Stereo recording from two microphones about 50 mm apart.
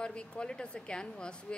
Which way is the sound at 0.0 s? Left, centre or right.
Centre.